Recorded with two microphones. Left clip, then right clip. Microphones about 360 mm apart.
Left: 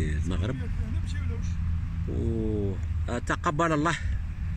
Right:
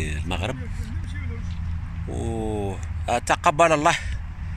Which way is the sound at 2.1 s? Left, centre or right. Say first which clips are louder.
Right 3 dB; right.